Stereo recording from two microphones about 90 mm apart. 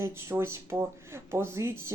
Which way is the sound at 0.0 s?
30° right (ahead or behind).